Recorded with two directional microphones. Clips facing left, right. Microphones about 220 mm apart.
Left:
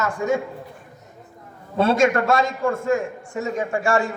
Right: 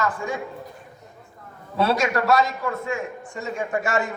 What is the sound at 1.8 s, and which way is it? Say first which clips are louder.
A man's voice: left 4 dB; 50° left (ahead or behind).